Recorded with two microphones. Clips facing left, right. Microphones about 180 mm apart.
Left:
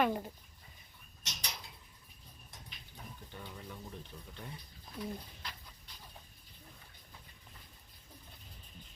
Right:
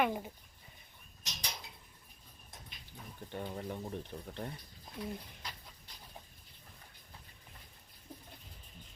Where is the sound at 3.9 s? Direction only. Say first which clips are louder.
Right 7 dB; 60° right (ahead or behind).